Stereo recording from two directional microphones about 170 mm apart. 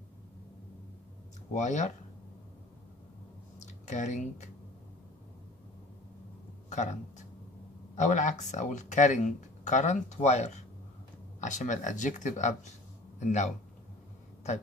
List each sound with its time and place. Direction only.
1.5 s speech: 45° left (ahead or behind)
3.5 s a sound: 45° left (ahead or behind)
6.7 s speech: 45° left (ahead or behind)